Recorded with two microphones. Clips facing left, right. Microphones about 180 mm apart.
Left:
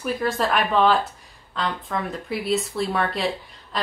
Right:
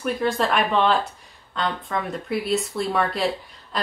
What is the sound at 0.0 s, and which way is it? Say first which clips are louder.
A woman's voice: right 1 dB; centre (ahead or behind).